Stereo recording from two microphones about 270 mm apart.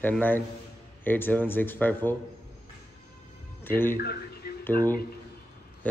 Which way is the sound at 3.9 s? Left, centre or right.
Left.